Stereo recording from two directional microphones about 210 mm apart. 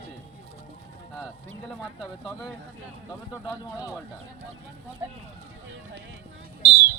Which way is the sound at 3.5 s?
15° left (ahead or behind).